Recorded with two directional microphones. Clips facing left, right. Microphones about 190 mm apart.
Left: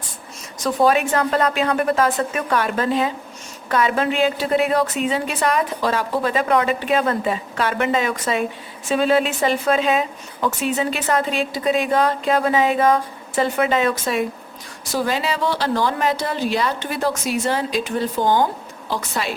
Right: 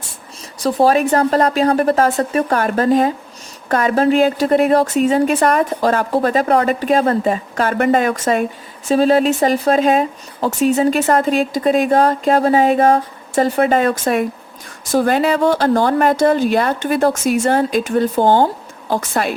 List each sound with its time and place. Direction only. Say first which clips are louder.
0.6 s a woman's voice: right 4 dB; 35° right (ahead or behind); by 19.3 s 50° right (ahead or behind)